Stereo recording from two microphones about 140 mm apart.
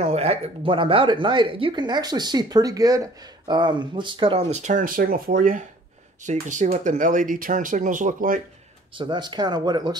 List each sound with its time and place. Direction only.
0.0 s speech: 50° right (ahead or behind); by 5.6 s 80° right
6.2 s speech: 60° right (ahead or behind)
8.9 s speech: 30° right (ahead or behind)